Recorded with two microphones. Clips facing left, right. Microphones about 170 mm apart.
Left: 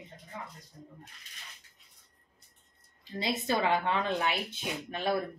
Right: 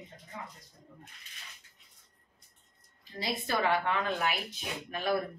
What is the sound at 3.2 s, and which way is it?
Speech, 20° left (ahead or behind).